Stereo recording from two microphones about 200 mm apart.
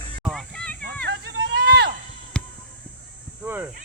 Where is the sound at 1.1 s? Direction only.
60° right (ahead or behind).